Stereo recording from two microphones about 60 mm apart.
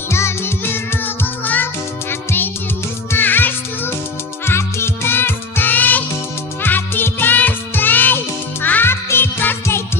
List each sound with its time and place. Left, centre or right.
0.1 s music: left
1.0 s music: left
3.1 s music: left
4.5 s music: left